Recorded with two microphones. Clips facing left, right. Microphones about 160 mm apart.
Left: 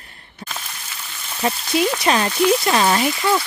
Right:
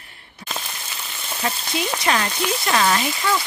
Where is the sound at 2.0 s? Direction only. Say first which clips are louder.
Left 5 dB; 20° left (ahead or behind).